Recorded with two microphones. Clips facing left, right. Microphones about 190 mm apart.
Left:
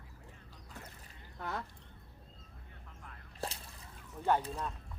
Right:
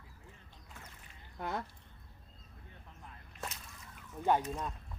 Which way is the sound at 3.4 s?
30° left (ahead or behind).